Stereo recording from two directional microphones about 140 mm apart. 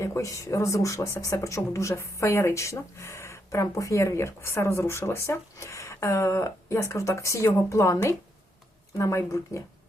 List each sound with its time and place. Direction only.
0.0 s speech: 20° left (ahead or behind)
9.0 s speech: 20° left (ahead or behind)